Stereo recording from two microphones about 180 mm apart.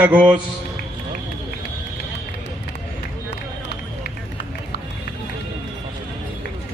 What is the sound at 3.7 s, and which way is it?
Run, 65° left (ahead or behind).